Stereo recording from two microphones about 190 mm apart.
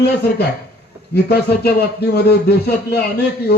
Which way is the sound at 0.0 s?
55° left (ahead or behind).